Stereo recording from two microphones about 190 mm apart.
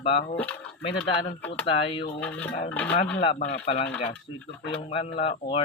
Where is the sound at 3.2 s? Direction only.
35° left (ahead or behind).